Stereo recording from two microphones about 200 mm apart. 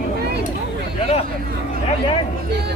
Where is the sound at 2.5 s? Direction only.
55° right (ahead or behind).